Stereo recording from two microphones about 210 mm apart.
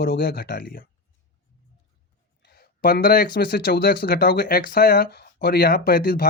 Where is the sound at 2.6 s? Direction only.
45° left (ahead or behind).